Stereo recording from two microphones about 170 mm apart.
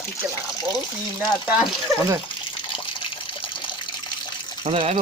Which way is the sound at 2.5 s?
30° left (ahead or behind).